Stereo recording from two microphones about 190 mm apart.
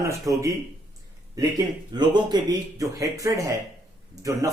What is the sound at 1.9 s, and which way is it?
Speech, 25° right (ahead or behind).